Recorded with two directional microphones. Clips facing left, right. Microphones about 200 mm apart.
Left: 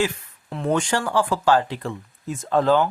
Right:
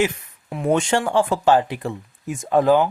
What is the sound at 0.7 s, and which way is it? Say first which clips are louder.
Speech: right 3 dB; 20° right (ahead or behind).